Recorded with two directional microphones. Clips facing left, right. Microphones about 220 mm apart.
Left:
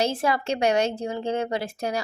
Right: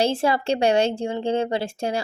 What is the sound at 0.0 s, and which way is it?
A woman's voice, 30° right (ahead or behind).